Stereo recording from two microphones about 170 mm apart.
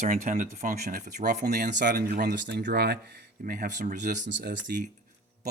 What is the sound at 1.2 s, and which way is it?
Speech, 65° right (ahead or behind).